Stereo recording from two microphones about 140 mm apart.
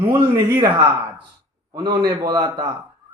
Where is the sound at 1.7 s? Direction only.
30° right (ahead or behind).